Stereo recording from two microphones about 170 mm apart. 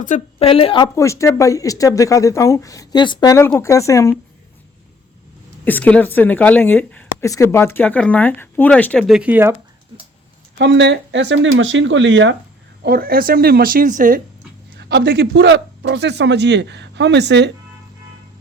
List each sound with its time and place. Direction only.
0.0 s a woman's voice: 40° left (ahead or behind)
0.9 s speech: 15° left (ahead or behind)
5.6 s speech: 10° left (ahead or behind); by 9.6 s 10° right (ahead or behind)
10.6 s speech: 90° right
12.8 s speech: 65° right (ahead or behind)
14.8 s speech: 75° right (ahead or behind)